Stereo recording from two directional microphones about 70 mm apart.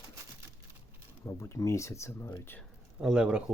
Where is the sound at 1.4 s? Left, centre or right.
Left.